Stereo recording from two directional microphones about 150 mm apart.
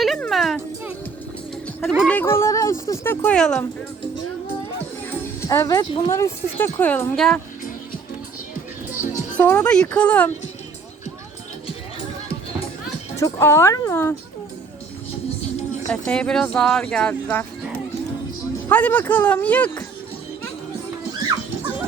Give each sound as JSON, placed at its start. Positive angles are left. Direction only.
{"t": 0.2, "sound": "music", "side_deg": 0}
{"t": 2.0, "sound": "speech", "side_deg": 10}
{"t": 3.3, "sound": "speech", "side_deg": 5}
{"t": 5.5, "sound": "speech", "side_deg": 25}
{"t": 8.9, "sound": "music", "side_deg": -15}
{"t": 9.4, "sound": "speech", "side_deg": 10}
{"t": 13.1, "sound": "speech", "side_deg": 20}
{"t": 15.9, "sound": "speech", "side_deg": 5}
{"t": 18.7, "sound": "speech", "side_deg": 10}